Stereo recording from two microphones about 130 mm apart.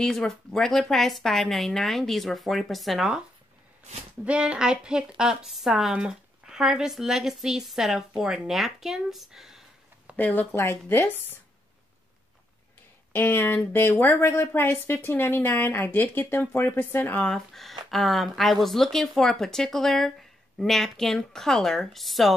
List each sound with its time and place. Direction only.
0.0 s speech: 5° left (ahead or behind)
4.2 s speech: 10° right (ahead or behind)
10.1 s speech: 15° left (ahead or behind)
13.1 s speech: 15° left (ahead or behind); by 22.3 s centre (ahead or behind)